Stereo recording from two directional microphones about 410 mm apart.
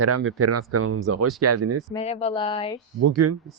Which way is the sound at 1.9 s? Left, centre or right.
Centre.